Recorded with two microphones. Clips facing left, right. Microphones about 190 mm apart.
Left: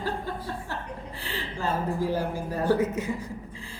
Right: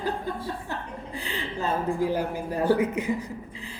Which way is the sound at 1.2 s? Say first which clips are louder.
Right 1 dB; 15° right (ahead or behind).